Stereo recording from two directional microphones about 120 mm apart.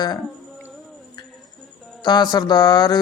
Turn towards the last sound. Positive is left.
turn(degrees=35)  # may be behind; listen again after turning